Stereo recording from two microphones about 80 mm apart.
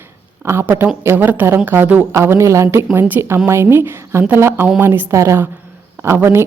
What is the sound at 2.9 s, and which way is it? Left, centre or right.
A woman's voice, right.